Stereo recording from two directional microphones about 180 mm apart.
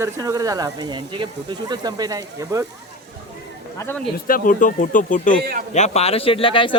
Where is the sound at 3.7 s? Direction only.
15° left (ahead or behind).